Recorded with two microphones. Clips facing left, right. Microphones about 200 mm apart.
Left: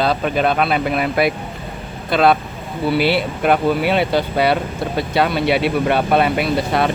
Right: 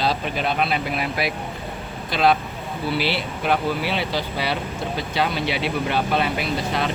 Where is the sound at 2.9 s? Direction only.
55° left (ahead or behind).